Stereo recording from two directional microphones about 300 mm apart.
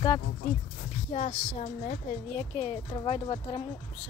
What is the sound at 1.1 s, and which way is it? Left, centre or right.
Speech, left.